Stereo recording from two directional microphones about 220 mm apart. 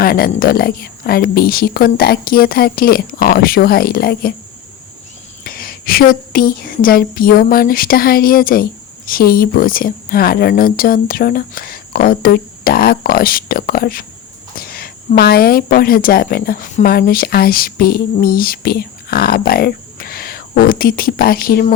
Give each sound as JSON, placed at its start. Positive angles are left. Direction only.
{"t": 0.0, "sound": "speech", "side_deg": 45}
{"t": 5.4, "sound": "a woman's voice", "side_deg": 40}